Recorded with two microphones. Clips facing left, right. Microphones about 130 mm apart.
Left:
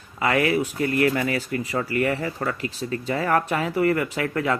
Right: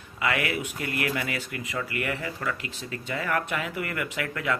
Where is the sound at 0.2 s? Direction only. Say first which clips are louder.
Left 7 dB; 35° left (ahead or behind).